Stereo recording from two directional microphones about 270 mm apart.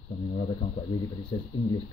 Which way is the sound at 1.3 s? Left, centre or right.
Centre.